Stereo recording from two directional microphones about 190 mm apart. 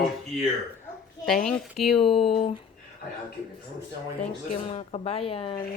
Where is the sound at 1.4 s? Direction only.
Centre (ahead or behind).